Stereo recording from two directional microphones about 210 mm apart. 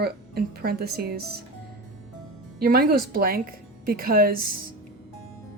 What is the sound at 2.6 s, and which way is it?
Speech, 45° right (ahead or behind).